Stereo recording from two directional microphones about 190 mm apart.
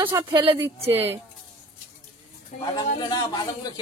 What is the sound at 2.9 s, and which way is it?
Speech, 25° left (ahead or behind).